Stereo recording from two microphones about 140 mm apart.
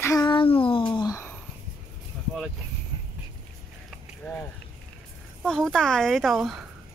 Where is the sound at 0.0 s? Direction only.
20° left (ahead or behind).